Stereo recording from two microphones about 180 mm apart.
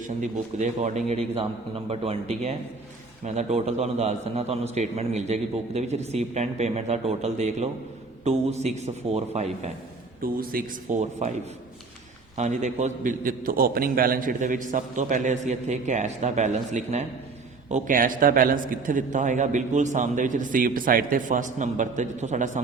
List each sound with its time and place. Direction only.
0.0 s a man's voice: 45° right (ahead or behind)
10.2 s a man's voice: 55° right (ahead or behind)
12.4 s a man's voice: 40° right (ahead or behind)